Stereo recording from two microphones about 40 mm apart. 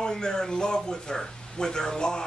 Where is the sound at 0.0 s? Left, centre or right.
Centre.